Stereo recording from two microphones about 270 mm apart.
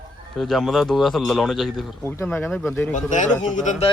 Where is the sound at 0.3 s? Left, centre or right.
Centre.